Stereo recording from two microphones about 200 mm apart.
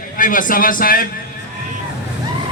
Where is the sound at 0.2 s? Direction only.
40° left (ahead or behind).